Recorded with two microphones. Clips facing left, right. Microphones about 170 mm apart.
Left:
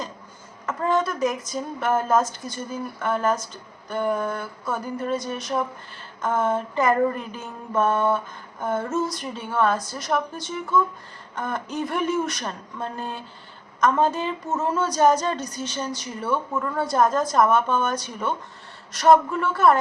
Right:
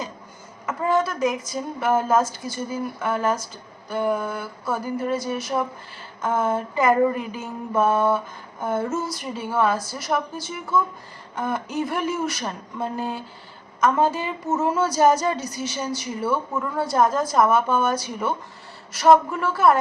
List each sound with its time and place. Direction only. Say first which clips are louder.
0.6 s a woman's voice: right 1 dB; 5° right (ahead or behind)